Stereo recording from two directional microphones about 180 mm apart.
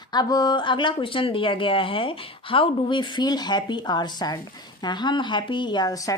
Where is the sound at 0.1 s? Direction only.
20° left (ahead or behind).